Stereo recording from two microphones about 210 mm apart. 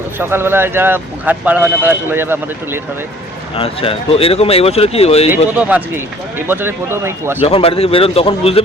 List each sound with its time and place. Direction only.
0.2 s speech: 10° right (ahead or behind)
3.5 s speech: 25° left (ahead or behind)
5.5 s speech: 10° right (ahead or behind)
7.4 s speech: 25° left (ahead or behind)